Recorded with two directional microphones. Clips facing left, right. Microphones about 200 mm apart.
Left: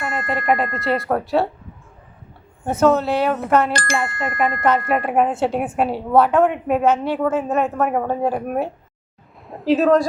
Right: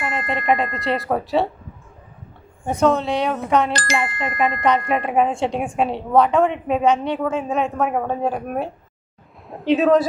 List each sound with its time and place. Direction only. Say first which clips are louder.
0.0 s a woman's voice: even; 5° left (ahead or behind)
2.6 s a woman's voice: left 2 dB; 5° left (ahead or behind)
3.7 s speech: left 1 dB; 50° left (ahead or behind)
4.6 s a woman's voice: left 2 dB; 5° left (ahead or behind)